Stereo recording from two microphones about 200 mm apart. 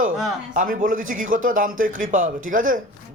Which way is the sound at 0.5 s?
45° right (ahead or behind).